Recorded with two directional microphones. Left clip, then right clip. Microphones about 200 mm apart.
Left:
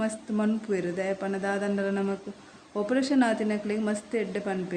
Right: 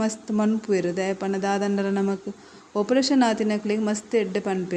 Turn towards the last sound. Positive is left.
turn(degrees=-20)  # may be behind; listen again after turning